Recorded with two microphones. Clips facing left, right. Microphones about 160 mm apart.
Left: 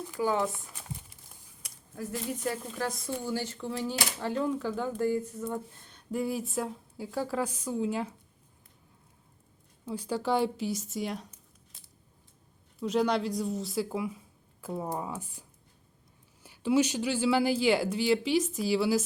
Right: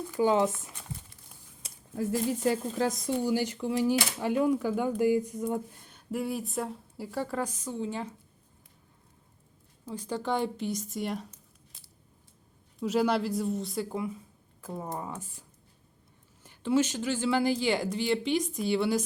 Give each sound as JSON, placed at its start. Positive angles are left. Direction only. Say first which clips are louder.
{"t": 0.2, "sound": "speech", "louder": "right 4 dB", "side_deg": -20}
{"t": 1.6, "sound": "speech", "louder": "right 7 dB", "side_deg": -25}
{"t": 3.2, "sound": "speech", "louder": "right 4 dB", "side_deg": -15}
{"t": 9.9, "sound": "speech", "louder": "left 2 dB", "side_deg": 10}
{"t": 12.8, "sound": "speech", "louder": "right 1 dB", "side_deg": -5}